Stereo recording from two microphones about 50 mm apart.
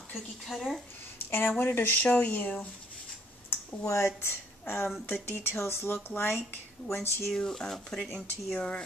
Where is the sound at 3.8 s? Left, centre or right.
Left.